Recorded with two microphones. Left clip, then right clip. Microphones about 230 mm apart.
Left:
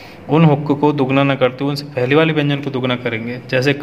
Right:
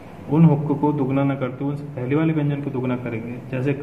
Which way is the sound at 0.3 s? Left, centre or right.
Left.